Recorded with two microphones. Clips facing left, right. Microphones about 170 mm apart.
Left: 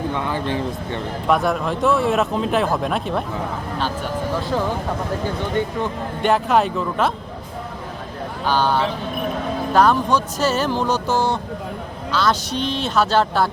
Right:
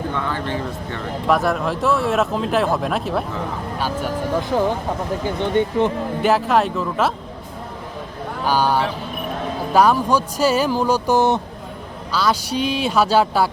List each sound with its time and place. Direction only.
0.1 s speech: 15° left (ahead or behind)
1.3 s a man's voice: centre (ahead or behind); by 4.6 s 15° right (ahead or behind)
6.2 s a man's voice: centre (ahead or behind)
8.4 s speech: 10° right (ahead or behind)